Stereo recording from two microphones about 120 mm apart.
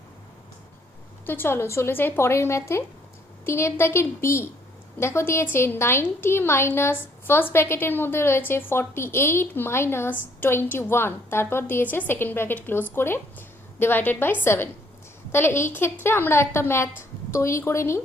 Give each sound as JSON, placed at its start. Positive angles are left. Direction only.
{"t": 1.3, "sound": "a woman's voice", "side_deg": 20}